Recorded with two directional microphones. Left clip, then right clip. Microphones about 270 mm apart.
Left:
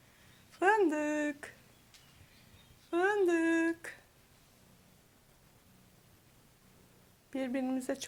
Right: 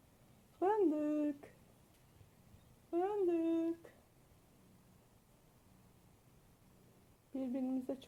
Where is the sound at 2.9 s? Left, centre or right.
Left.